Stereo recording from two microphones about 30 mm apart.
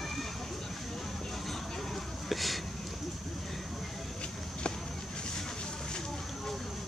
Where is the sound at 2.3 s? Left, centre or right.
Centre.